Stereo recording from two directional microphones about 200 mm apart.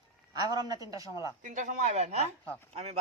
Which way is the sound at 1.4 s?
40° right (ahead or behind).